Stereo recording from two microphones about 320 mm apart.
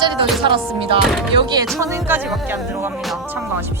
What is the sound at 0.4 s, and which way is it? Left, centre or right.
Music, centre.